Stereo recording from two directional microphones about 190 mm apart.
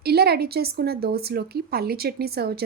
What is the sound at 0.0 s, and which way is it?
Speech, 55° right (ahead or behind).